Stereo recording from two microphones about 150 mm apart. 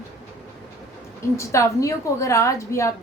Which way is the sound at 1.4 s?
20° left (ahead or behind).